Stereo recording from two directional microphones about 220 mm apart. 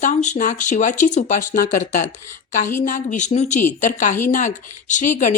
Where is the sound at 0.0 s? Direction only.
35° left (ahead or behind).